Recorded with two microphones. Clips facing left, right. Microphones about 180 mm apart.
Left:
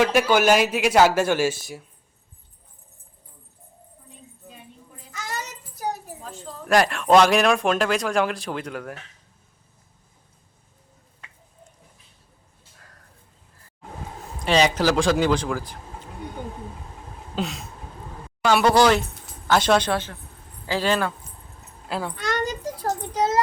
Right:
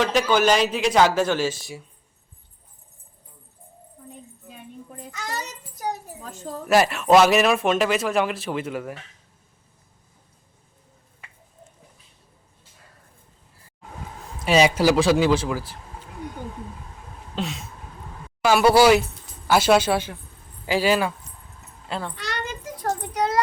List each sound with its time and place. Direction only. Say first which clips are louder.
0.0 s speech: left 1 dB; 10° left (ahead or behind)
6.7 s speech: right 1 dB; 5° right (ahead or behind)
14.4 s speech: right 2 dB; 10° right (ahead or behind)
17.3 s a sound: left 1 dB; centre (ahead or behind)
18.4 s speech: right 2 dB; 10° right (ahead or behind)
21.8 s speech: left 2 dB; centre (ahead or behind)
22.1 s a sound: left 5 dB; 50° left (ahead or behind); by 23.4 s 25° left (ahead or behind)